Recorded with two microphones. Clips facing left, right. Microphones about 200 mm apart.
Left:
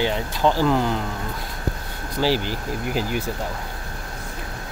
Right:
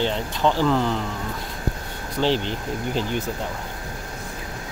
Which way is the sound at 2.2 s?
5° left (ahead or behind).